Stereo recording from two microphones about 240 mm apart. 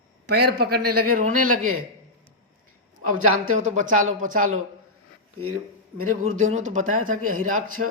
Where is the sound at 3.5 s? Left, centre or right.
Right.